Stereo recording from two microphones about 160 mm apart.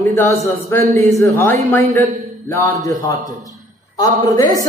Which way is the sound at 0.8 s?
45° right (ahead or behind).